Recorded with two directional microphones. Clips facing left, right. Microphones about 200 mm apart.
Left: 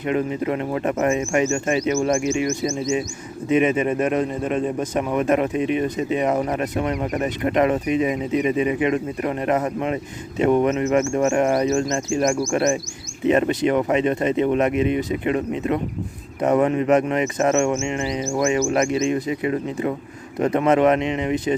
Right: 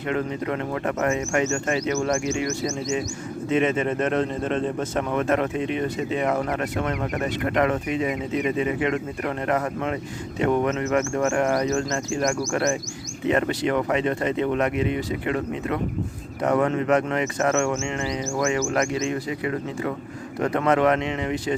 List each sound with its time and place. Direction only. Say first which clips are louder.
0.1 s a man's voice: left 4 dB; 15° left (ahead or behind)